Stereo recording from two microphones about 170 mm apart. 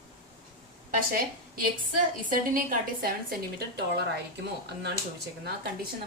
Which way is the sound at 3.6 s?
75° right (ahead or behind).